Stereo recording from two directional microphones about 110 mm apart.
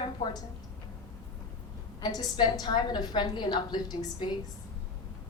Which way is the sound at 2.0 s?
40° left (ahead or behind).